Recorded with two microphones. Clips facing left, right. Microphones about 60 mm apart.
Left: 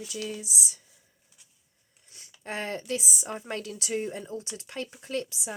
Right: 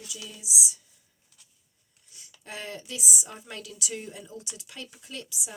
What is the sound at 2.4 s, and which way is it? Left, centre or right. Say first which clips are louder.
Speech: left 6 dB; left.